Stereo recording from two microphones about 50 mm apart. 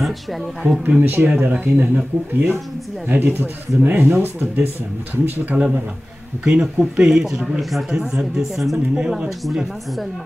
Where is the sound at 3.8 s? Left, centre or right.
Right.